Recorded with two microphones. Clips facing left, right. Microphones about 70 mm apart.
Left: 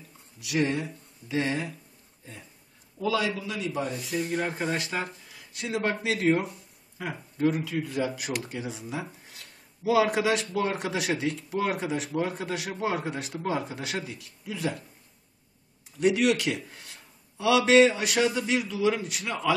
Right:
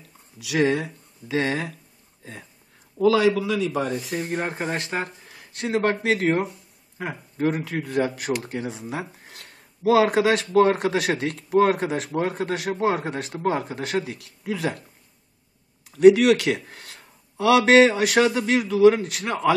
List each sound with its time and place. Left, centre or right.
0.4 s speech: right
3.0 s speech: right
3.3 s a man's voice: right
4.1 s speech: right
14.0 s speech: right
16.0 s a man's voice: right